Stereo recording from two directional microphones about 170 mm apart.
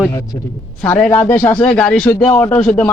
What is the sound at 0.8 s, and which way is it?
A man's voice, 10° left (ahead or behind).